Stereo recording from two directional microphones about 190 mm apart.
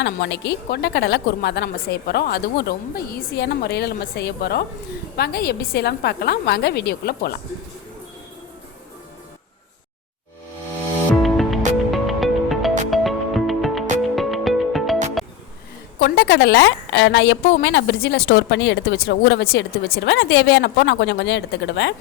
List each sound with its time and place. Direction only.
0.0 s a woman's voice: 65° left (ahead or behind)
11.1 s music: centre (ahead or behind)
16.0 s a woman's voice: 60° left (ahead or behind)